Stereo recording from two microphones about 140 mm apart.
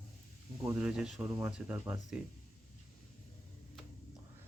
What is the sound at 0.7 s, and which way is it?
Speech, 5° right (ahead or behind).